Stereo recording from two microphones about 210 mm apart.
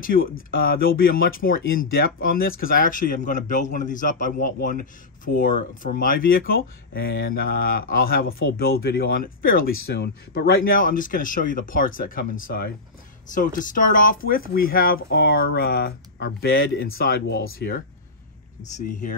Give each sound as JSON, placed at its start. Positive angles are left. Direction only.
{"t": 0.0, "sound": "speech", "side_deg": 40}
{"t": 18.6, "sound": "speech", "side_deg": 35}